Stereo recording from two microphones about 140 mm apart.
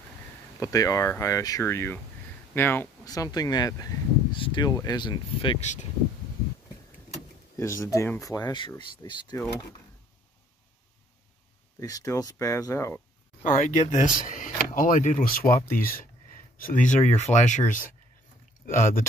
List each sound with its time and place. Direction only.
0.6 s speech: 25° left (ahead or behind)
3.1 s speech: 25° left (ahead or behind)
5.6 s speech: 60° left (ahead or behind)
7.5 s speech: 20° left (ahead or behind)
11.8 s speech: 25° left (ahead or behind)
13.4 s speech: 65° left (ahead or behind); by 15.9 s 90° left
16.5 s speech: 80° left